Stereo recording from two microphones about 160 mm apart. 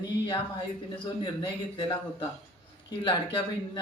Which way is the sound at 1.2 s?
25° left (ahead or behind).